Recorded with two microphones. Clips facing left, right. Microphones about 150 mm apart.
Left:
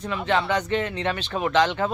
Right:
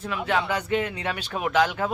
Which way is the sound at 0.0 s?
5° right (ahead or behind).